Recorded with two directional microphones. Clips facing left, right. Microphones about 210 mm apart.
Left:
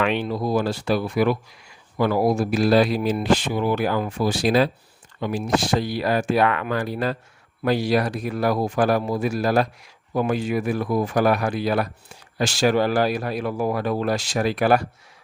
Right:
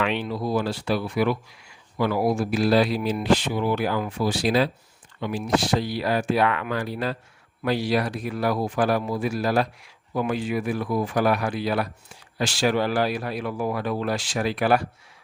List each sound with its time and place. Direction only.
0.0 s speech: 45° left (ahead or behind)